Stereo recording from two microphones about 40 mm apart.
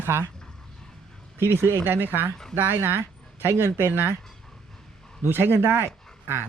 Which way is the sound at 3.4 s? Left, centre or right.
Right.